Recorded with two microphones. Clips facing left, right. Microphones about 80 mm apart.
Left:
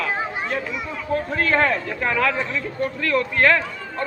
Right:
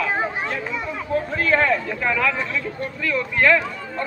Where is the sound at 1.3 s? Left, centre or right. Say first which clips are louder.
Right 1 dB; left.